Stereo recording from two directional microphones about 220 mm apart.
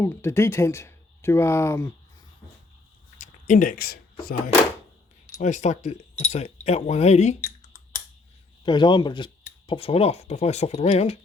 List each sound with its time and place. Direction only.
0.0 s speech: 10° left (ahead or behind)
3.2 s speech: 35° left (ahead or behind)
8.6 s speech: 20° left (ahead or behind)